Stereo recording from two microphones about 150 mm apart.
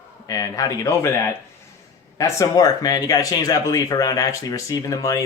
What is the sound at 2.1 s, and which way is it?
Speech, 20° left (ahead or behind).